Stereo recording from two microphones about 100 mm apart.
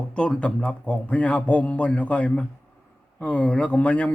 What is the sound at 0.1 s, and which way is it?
A man's voice, 10° left (ahead or behind).